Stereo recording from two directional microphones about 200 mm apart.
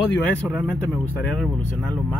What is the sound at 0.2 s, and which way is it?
Speech, 5° left (ahead or behind).